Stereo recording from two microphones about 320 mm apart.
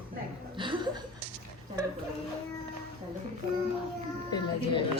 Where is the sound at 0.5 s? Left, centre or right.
Centre.